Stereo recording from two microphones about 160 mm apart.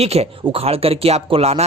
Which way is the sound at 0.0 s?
40° right (ahead or behind).